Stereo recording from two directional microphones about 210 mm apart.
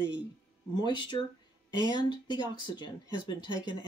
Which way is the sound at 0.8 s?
20° left (ahead or behind).